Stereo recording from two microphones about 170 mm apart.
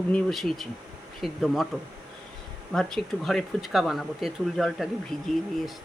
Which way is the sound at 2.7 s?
5° left (ahead or behind).